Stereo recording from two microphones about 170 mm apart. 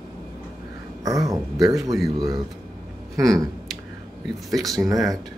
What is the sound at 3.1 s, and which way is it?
Speech, 20° right (ahead or behind).